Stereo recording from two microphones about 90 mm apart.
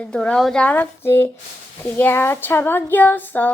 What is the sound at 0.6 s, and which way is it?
Child singing, 20° left (ahead or behind).